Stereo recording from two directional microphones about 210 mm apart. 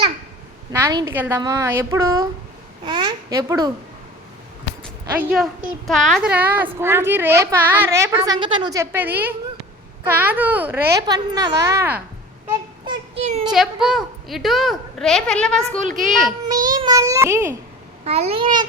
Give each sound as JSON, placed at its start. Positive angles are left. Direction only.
{"t": 0.7, "sound": "a woman's voice", "side_deg": -15}
{"t": 5.1, "sound": "a woman's voice", "side_deg": -5}
{"t": 12.8, "sound": "a sound", "side_deg": -20}
{"t": 13.4, "sound": "a woman's voice", "side_deg": 0}
{"t": 15.8, "sound": "a child's voice", "side_deg": -40}
{"t": 16.0, "sound": "a woman's voice", "side_deg": 0}
{"t": 16.6, "sound": "a sound", "side_deg": -20}
{"t": 18.0, "sound": "a child's voice", "side_deg": -30}